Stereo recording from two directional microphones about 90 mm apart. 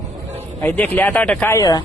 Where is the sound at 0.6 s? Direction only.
20° left (ahead or behind).